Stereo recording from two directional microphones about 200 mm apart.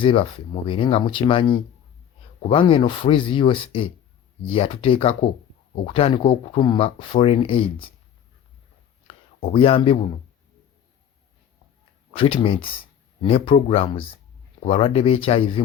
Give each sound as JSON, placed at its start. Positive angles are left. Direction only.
{"t": 0.0, "sound": "speech", "side_deg": 25}
{"t": 9.0, "sound": "a sound", "side_deg": 30}
{"t": 12.1, "sound": "speech", "side_deg": 25}